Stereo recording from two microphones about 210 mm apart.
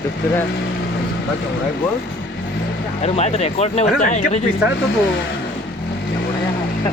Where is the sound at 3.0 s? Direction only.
30° left (ahead or behind).